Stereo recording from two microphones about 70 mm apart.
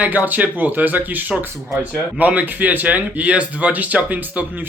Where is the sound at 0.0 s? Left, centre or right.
Right.